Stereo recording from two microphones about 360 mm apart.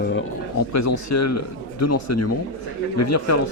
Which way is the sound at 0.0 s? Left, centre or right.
Left.